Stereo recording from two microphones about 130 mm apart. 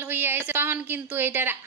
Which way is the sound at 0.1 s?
15° right (ahead or behind).